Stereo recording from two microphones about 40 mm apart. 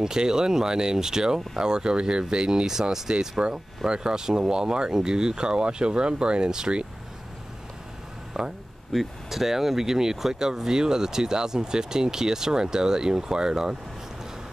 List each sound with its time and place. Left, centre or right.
0.0 s speech: centre
8.3 s a sound: centre
8.9 s speech: centre